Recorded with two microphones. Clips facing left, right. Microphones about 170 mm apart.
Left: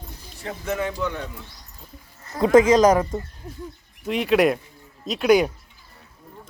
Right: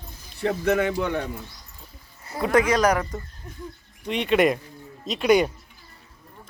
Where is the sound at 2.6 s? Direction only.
20° left (ahead or behind).